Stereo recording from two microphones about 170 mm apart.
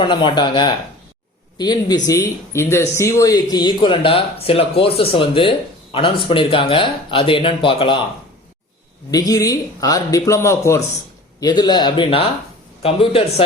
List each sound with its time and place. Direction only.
0.0 s speech: 30° left (ahead or behind)
9.0 s speech: 20° left (ahead or behind)